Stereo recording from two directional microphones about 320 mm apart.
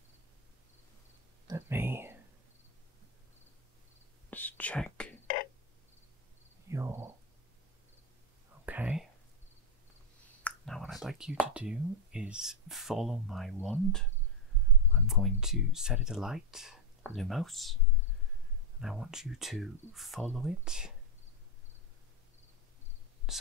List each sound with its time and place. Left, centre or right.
1.5 s a sound: centre
4.3 s whispering: centre
6.7 s a sound: centre
8.6 s whispering: centre
10.4 s speech: centre
18.8 s speech: centre
23.3 s speech: centre